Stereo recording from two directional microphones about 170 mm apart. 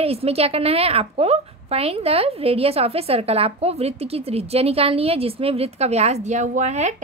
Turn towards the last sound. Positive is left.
turn(degrees=-40)  # may be behind; listen again after turning